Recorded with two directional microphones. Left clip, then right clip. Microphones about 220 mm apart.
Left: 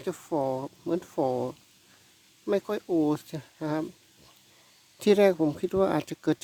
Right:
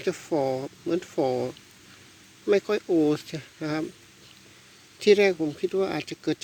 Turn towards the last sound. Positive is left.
turn(degrees=35)  # may be behind; listen again after turning